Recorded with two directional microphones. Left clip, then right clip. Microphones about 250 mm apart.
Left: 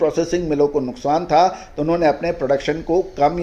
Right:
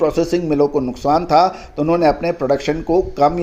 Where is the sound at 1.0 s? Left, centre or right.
Right.